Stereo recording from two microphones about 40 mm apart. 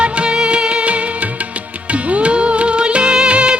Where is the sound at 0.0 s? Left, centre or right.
Right.